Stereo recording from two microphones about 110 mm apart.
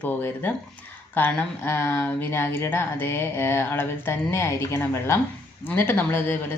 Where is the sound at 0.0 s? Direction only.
15° left (ahead or behind).